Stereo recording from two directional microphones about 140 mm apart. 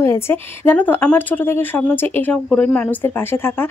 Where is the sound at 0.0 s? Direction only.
15° left (ahead or behind).